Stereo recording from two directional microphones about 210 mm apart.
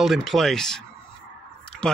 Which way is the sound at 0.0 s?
Centre (ahead or behind).